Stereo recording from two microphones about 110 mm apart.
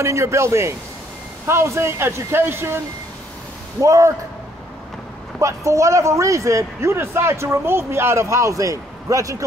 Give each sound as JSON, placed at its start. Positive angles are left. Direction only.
{"t": 0.0, "sound": "a man's voice", "side_deg": -25}
{"t": 3.8, "sound": "a man's voice", "side_deg": -30}
{"t": 5.4, "sound": "a man's voice", "side_deg": -30}